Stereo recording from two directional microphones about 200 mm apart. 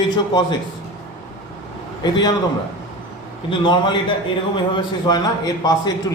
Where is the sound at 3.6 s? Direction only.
25° left (ahead or behind).